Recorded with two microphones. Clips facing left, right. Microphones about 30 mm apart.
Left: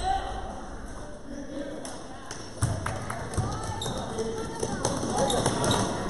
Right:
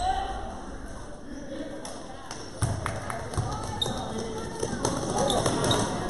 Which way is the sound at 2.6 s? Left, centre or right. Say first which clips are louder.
Even; centre.